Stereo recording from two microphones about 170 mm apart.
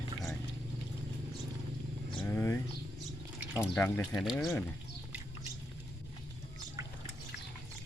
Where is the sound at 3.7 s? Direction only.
5° left (ahead or behind).